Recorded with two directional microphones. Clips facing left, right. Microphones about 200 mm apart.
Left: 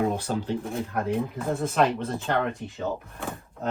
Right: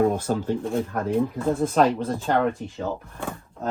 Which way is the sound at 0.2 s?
45° right (ahead or behind).